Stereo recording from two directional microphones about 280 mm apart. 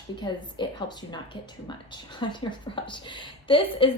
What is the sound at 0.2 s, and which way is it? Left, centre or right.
A woman's voice, centre.